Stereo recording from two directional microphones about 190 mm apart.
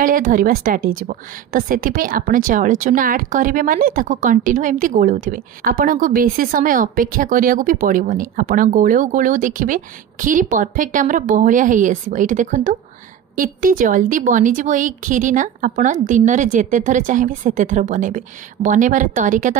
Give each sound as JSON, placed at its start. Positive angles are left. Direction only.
{"t": 0.0, "sound": "a woman's voice", "side_deg": -45}